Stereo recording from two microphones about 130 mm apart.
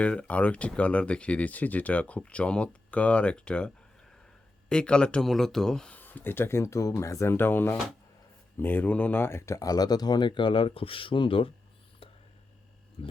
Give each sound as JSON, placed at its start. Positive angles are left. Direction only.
{"t": 0.0, "sound": "speech", "side_deg": 10}
{"t": 4.7, "sound": "speech", "side_deg": 5}
{"t": 13.0, "sound": "speech", "side_deg": 45}